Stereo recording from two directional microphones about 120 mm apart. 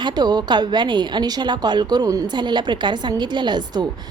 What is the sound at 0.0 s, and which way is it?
A woman's voice, 35° right (ahead or behind).